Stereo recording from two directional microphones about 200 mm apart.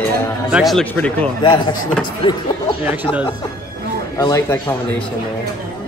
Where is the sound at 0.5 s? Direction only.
Centre (ahead or behind).